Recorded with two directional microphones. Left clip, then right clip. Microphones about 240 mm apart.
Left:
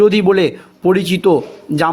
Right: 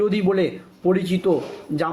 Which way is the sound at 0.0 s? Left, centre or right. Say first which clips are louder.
Left 9 dB; left.